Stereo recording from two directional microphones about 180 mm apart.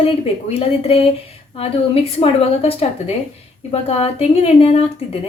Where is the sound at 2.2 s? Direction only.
35° left (ahead or behind).